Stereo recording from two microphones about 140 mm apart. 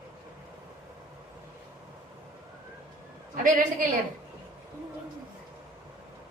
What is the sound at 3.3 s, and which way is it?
Speech, 75° right (ahead or behind).